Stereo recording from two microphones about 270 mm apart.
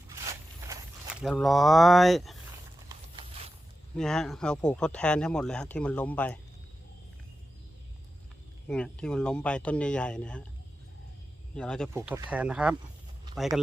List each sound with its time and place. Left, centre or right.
0.7 s speech: centre
2.9 s a sound: right
3.9 s speech: centre
8.6 s speech: centre
11.5 s speech: centre